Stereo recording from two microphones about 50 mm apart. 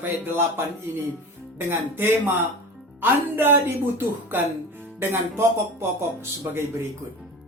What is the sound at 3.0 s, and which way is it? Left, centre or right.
Speech, right.